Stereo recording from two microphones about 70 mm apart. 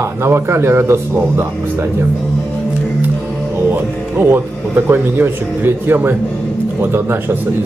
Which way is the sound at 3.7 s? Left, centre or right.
Right.